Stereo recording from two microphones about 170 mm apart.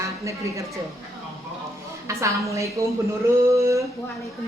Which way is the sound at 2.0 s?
20° right (ahead or behind).